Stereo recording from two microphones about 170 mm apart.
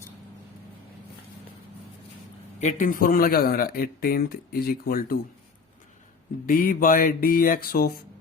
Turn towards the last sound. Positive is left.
turn(degrees=60)  # may be behind; listen again after turning